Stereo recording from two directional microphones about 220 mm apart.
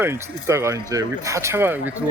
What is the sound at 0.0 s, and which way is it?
Speech, 10° right (ahead or behind).